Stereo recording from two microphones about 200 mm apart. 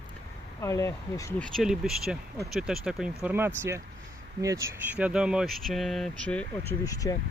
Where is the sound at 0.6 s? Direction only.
15° left (ahead or behind).